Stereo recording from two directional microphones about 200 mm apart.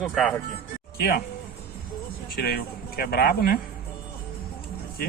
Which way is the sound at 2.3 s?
50° left (ahead or behind).